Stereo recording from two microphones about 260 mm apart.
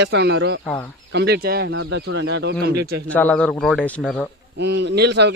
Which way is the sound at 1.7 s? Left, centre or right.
Right.